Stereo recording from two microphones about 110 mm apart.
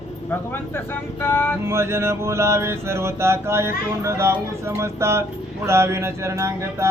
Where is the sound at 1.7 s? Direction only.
25° right (ahead or behind).